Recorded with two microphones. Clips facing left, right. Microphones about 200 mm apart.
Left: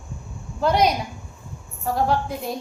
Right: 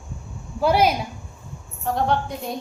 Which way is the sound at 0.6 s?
5° right (ahead or behind).